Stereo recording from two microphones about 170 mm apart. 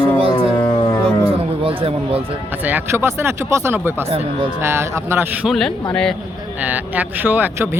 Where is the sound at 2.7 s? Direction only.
15° right (ahead or behind).